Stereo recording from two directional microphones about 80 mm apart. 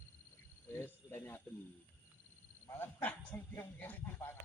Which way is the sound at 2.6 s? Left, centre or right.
Left.